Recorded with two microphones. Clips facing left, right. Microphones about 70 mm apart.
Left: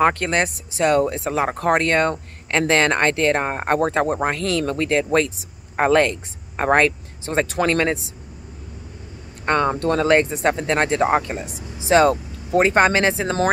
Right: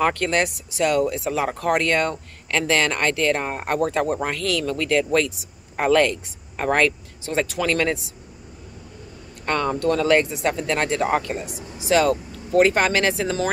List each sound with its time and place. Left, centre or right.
0.0 s speech: left
9.5 s speech: left